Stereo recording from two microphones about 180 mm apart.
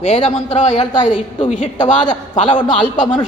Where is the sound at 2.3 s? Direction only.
25° left (ahead or behind).